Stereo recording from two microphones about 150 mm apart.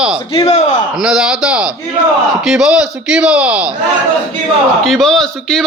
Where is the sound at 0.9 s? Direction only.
5° right (ahead or behind).